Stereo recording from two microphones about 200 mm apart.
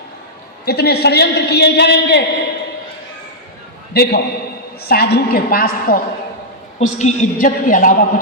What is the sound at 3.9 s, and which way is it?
A man's voice, 55° left (ahead or behind).